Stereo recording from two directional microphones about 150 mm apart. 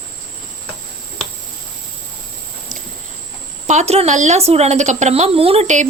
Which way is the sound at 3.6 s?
50° right (ahead or behind).